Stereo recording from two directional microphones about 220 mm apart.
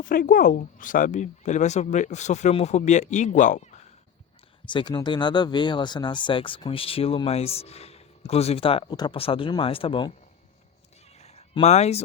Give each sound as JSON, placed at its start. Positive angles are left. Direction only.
{"t": 0.0, "sound": "speech", "side_deg": 40}
{"t": 4.6, "sound": "speech", "side_deg": 20}
{"t": 11.2, "sound": "a sound", "side_deg": 30}